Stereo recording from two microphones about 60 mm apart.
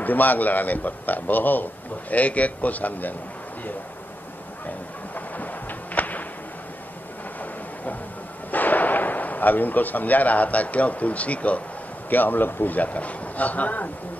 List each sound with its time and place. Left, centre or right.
0.0 s speech: left
4.6 s a sound: left
8.5 s speech: left